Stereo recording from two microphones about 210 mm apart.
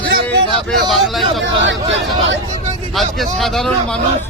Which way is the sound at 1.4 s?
60° right (ahead or behind).